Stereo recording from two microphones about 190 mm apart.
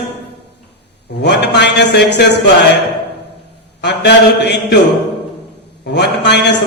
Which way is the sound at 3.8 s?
65° left (ahead or behind).